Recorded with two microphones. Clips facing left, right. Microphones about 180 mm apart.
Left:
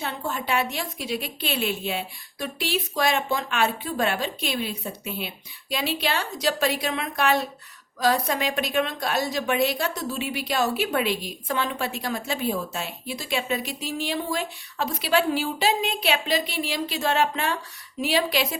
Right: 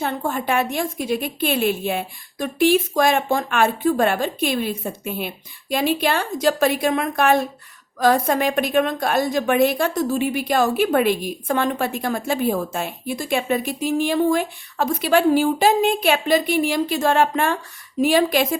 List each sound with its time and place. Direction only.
0.0 s a woman's voice: 50° right (ahead or behind)